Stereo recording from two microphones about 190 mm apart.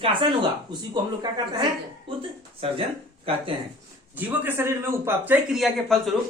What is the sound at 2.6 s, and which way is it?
Speech, 30° right (ahead or behind).